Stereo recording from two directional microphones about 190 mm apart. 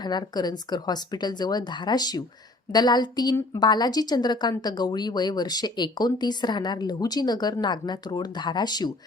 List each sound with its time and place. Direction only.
0.0 s a woman's voice: 20° left (ahead or behind)